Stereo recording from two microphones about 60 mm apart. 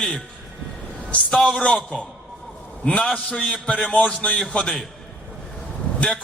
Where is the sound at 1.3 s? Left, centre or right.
Centre.